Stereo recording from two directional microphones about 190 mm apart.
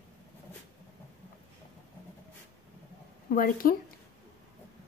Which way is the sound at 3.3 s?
50° left (ahead or behind).